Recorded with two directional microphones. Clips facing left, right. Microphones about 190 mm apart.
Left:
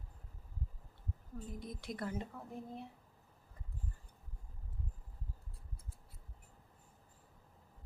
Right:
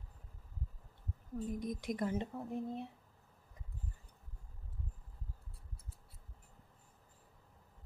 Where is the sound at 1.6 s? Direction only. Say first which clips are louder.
Right 3 dB; 15° right (ahead or behind).